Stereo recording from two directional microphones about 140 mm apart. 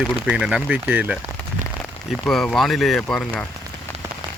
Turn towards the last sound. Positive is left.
turn(degrees=5)  # may be behind; listen again after turning